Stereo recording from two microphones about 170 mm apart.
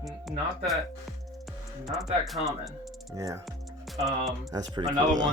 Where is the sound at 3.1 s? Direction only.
20° right (ahead or behind).